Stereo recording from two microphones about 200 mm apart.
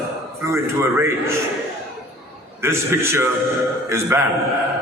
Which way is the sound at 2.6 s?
10° right (ahead or behind).